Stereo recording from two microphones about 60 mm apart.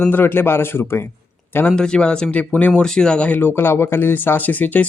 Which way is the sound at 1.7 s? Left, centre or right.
Centre.